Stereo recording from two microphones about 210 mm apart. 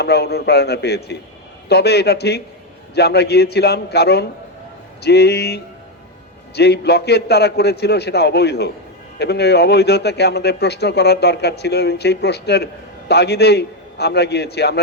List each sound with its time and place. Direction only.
0.0 s a man's voice: 50° left (ahead or behind)
6.6 s a man's voice: 50° left (ahead or behind)